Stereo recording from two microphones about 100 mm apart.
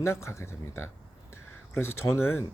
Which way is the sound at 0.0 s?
25° left (ahead or behind).